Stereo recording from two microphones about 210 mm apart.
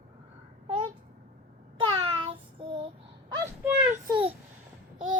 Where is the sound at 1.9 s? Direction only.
25° right (ahead or behind).